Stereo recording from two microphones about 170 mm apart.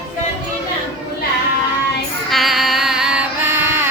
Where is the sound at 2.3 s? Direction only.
Centre (ahead or behind).